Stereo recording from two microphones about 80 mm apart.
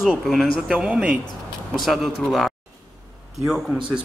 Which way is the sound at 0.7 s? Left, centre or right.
Centre.